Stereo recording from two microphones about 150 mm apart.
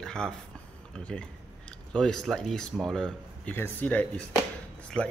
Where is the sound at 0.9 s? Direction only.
5° left (ahead or behind).